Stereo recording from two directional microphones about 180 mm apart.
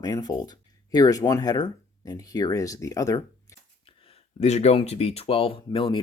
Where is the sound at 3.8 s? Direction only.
30° left (ahead or behind).